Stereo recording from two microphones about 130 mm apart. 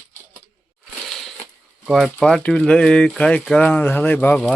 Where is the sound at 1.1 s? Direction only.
Centre (ahead or behind).